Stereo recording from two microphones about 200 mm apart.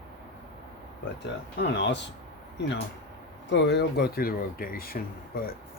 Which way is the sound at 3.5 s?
60° left (ahead or behind).